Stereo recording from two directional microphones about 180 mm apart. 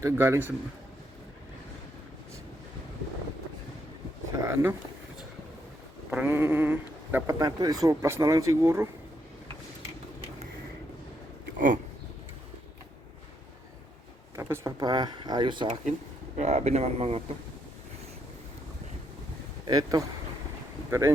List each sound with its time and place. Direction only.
0.0 s speech: 15° right (ahead or behind)
4.3 s speech: 15° right (ahead or behind)
6.1 s speech: 10° right (ahead or behind)
11.5 s speech: 45° right (ahead or behind)
14.3 s speech: 15° right (ahead or behind)
16.4 s speech: 40° right (ahead or behind)
19.6 s speech: 20° right (ahead or behind)